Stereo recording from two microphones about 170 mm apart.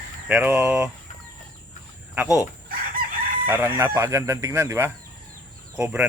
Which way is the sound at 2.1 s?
5° right (ahead or behind).